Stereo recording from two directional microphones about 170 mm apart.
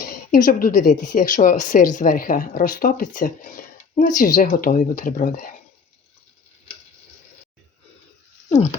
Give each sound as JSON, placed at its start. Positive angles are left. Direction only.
{"t": 0.3, "sound": "a woman's voice", "side_deg": 55}